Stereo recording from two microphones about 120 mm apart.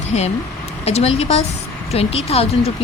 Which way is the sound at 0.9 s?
60° left (ahead or behind).